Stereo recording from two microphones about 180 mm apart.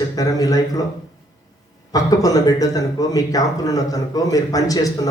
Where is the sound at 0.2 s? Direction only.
20° left (ahead or behind).